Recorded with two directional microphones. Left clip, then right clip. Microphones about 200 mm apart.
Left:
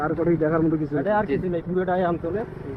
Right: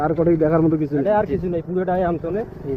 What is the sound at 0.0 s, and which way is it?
A man's voice, 35° right (ahead or behind).